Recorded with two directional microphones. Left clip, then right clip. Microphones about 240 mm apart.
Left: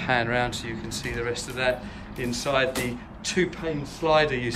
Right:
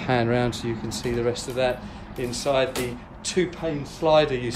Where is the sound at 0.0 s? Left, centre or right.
Right.